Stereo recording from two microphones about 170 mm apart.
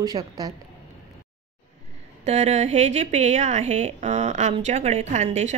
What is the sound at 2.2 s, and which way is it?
A woman's voice, 40° right (ahead or behind).